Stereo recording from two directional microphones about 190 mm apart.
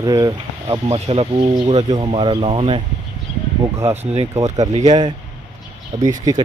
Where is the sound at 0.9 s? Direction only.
35° right (ahead or behind).